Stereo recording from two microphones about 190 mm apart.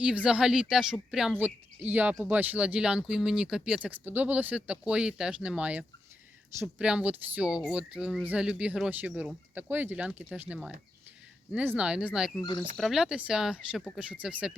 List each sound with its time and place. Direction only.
0.0 s speech: 5° right (ahead or behind)
12.4 s speech: 20° left (ahead or behind)
12.7 s speech: centre (ahead or behind)